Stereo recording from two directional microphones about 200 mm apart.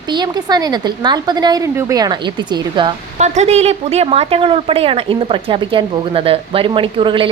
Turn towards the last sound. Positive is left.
turn(degrees=-25)  # may be behind; listen again after turning